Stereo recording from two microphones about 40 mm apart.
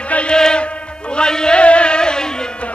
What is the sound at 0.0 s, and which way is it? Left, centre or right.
Music, left.